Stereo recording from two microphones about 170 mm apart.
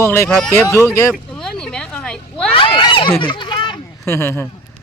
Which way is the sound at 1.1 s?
5° left (ahead or behind).